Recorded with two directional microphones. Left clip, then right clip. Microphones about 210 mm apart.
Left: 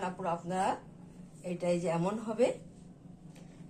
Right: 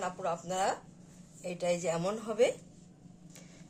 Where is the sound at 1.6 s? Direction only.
45° right (ahead or behind).